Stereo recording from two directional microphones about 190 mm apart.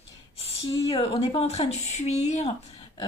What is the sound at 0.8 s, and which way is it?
A woman's voice, 30° left (ahead or behind).